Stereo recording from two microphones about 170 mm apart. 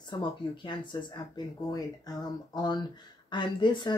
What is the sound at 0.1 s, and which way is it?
Speech, 25° left (ahead or behind).